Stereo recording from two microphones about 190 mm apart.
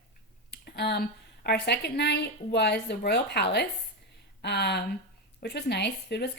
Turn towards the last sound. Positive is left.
turn(degrees=60)  # may be behind; listen again after turning